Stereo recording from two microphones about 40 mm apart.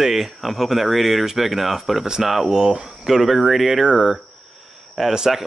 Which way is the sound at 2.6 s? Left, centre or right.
Centre.